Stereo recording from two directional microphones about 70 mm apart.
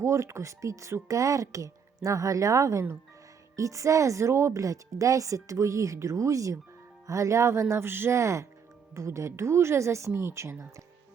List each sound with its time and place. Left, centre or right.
0.0 s speech: right